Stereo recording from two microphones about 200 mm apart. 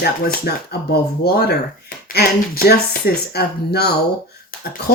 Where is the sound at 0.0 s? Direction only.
55° left (ahead or behind).